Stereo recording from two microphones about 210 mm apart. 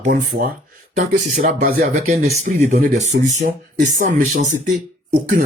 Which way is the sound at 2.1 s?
30° right (ahead or behind).